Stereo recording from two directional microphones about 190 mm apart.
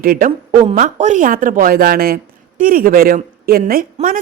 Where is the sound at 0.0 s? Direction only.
50° right (ahead or behind).